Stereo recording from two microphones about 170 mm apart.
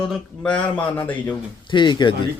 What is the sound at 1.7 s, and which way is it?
Speech, 25° left (ahead or behind).